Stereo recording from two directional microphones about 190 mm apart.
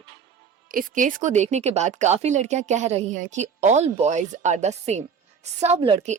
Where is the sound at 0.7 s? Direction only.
45° right (ahead or behind).